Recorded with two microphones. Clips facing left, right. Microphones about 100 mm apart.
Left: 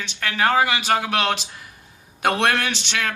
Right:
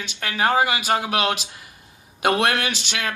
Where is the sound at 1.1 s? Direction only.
5° right (ahead or behind).